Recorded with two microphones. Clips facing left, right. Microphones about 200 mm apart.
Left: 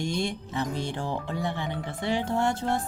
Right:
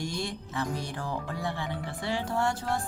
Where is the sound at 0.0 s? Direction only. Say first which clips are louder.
Left 5 dB; 25° left (ahead or behind).